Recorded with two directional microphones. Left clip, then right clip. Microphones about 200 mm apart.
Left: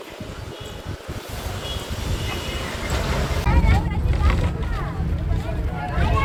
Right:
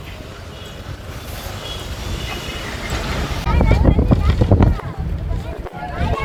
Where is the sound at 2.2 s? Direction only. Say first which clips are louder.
Right 2 dB; 60° left (ahead or behind).